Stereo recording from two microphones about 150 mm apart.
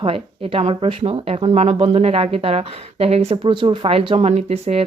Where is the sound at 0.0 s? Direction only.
40° right (ahead or behind).